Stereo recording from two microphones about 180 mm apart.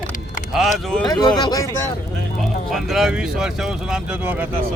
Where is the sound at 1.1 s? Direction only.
25° left (ahead or behind).